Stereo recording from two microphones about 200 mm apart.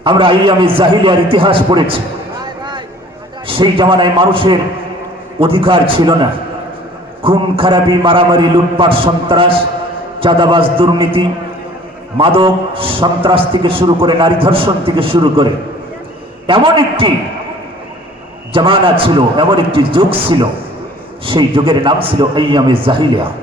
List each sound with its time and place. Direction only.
0.0 s a man's voice: 25° right (ahead or behind)
2.4 s a sound: 20° right (ahead or behind)
3.4 s a man's voice: 25° right (ahead or behind)
16.5 s a man's voice: 25° right (ahead or behind)
18.5 s a man's voice: 25° right (ahead or behind)